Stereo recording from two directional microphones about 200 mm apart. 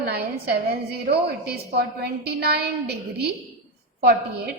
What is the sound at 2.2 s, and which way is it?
A woman's voice, 55° right (ahead or behind).